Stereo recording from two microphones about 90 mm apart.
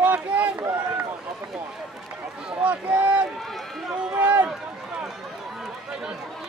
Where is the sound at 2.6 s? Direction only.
15° right (ahead or behind).